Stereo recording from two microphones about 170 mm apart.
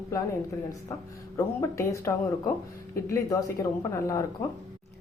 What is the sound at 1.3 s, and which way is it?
A woman's voice, 20° left (ahead or behind).